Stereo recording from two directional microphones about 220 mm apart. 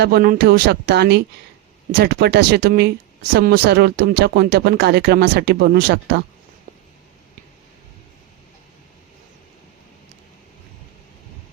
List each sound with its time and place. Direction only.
0.0 s speech: 45° right (ahead or behind)